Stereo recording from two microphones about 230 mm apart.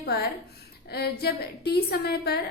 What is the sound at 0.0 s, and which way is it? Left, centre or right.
A woman's voice, left.